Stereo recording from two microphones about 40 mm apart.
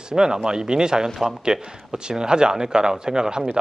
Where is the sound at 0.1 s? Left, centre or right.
Centre.